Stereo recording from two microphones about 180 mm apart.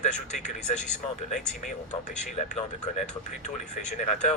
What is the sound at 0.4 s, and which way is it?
Speech, 40° left (ahead or behind).